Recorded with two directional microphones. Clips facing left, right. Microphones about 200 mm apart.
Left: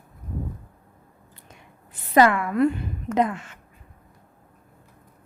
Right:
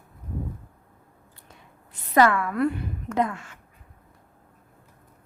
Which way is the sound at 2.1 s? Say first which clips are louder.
Left 2 dB; 15° left (ahead or behind).